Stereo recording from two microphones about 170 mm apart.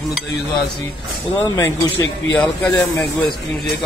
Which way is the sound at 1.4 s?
10° left (ahead or behind).